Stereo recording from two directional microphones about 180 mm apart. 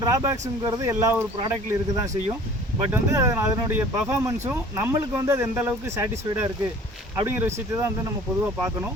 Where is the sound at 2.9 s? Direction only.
15° right (ahead or behind).